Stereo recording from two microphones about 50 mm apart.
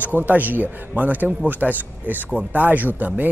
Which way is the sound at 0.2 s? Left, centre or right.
Right.